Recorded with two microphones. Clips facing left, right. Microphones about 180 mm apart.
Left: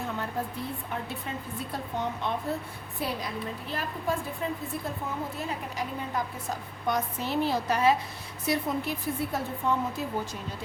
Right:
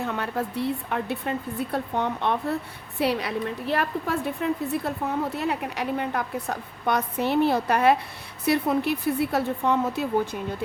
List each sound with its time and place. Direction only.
0.1 s a woman's voice: 75° right (ahead or behind)